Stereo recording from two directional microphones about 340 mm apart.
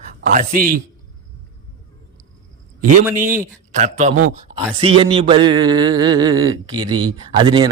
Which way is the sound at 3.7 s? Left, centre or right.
Right.